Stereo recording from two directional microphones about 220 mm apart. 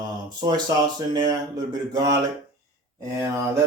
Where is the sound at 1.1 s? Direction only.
20° right (ahead or behind).